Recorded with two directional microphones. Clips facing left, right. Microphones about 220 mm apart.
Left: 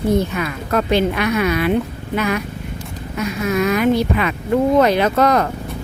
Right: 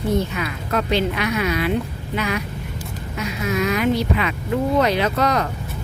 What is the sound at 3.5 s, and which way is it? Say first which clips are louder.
Speech: left 4 dB; 50° left (ahead or behind).